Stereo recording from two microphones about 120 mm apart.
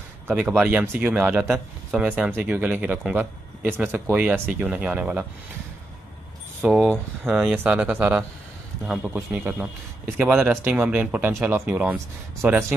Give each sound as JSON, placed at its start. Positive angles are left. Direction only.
{"t": 0.3, "sound": "speech", "side_deg": -15}
{"t": 6.6, "sound": "speech", "side_deg": -10}
{"t": 11.3, "sound": "speech", "side_deg": -25}